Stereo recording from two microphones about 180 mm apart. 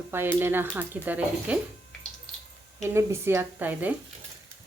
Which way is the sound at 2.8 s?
15° right (ahead or behind).